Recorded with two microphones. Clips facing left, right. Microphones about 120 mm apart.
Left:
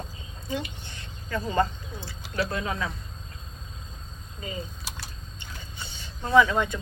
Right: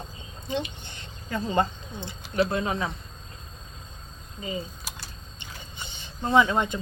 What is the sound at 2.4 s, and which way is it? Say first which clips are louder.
Speech: right 4 dB; 25° right (ahead or behind).